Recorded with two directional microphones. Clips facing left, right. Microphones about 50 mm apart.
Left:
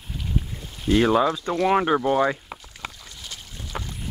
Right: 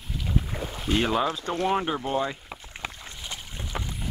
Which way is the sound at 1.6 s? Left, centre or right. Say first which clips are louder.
Left 7 dB; left.